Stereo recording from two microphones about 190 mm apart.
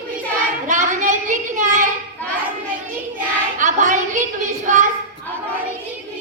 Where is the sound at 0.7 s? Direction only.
40° right (ahead or behind).